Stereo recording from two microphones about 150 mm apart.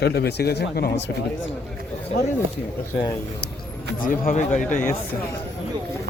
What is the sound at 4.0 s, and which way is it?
Speech, 60° left (ahead or behind).